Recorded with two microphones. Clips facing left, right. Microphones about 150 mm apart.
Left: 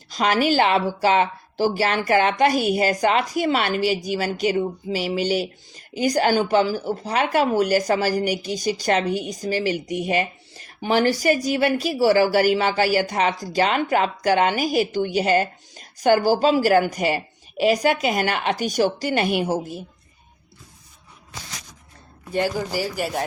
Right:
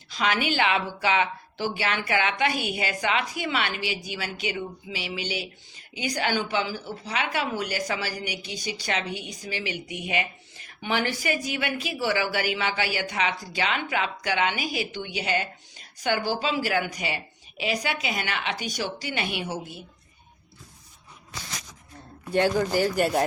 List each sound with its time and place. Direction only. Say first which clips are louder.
0.1 s a woman's voice: left 6 dB; 40° left (ahead or behind)
22.3 s speech: right 1 dB; 10° left (ahead or behind)